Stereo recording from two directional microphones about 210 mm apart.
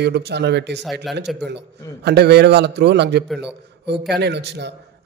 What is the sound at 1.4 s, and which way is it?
A man's voice, 55° right (ahead or behind).